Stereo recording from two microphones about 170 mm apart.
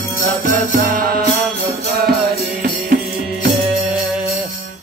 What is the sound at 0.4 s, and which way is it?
Music, 55° right (ahead or behind).